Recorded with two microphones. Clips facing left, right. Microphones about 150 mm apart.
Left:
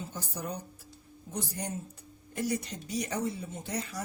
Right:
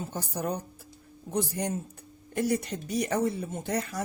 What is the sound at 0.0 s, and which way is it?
Speech, 55° right (ahead or behind).